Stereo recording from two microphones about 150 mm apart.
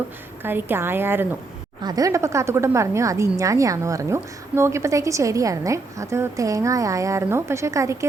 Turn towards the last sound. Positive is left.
turn(degrees=-20)  # may be behind; listen again after turning